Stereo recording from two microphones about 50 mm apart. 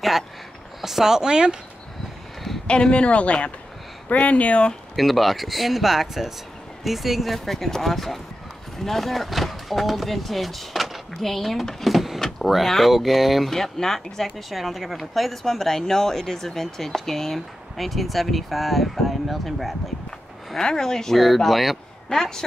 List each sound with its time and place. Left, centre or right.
0.7 s speech: centre
2.6 s speech: centre
4.9 s speech: centre
12.2 s power windows: centre
12.4 s speech: centre
13.5 s speech: centre
20.1 s speech: centre